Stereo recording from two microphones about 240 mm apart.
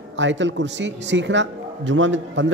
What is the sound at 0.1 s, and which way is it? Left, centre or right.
A man's voice, right.